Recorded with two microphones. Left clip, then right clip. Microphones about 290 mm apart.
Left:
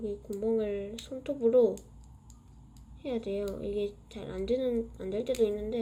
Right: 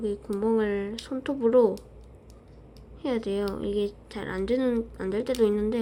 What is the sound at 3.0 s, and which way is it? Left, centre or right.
A woman's voice, centre.